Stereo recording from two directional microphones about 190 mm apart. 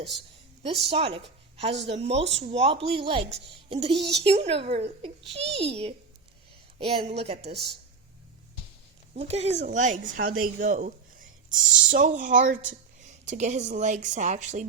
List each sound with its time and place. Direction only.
0.6 s speech: 30° right (ahead or behind)
9.1 s speech: 35° right (ahead or behind)